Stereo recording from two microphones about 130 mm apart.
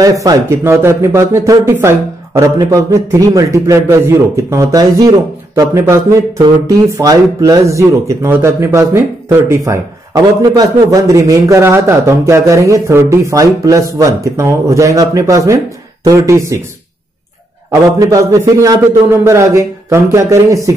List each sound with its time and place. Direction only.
0.0 s a man's voice: 25° right (ahead or behind)
17.6 s a man's voice: 25° right (ahead or behind)